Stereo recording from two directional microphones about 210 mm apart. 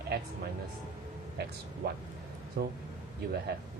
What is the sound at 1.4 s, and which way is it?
Speech, 50° right (ahead or behind).